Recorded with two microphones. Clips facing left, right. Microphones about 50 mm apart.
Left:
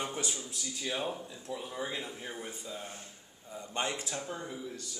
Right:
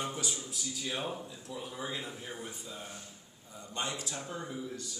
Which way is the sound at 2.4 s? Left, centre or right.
Left.